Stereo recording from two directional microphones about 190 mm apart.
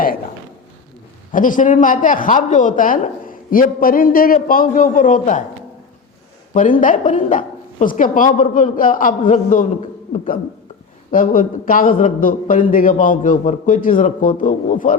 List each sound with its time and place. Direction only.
1.3 s a man's voice: 45° left (ahead or behind)
6.5 s a man's voice: 45° left (ahead or behind)